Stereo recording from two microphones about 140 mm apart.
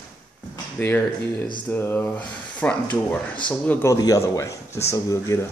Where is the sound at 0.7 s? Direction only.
15° left (ahead or behind).